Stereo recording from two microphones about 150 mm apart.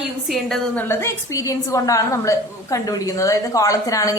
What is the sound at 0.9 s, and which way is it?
A woman's voice, 20° left (ahead or behind).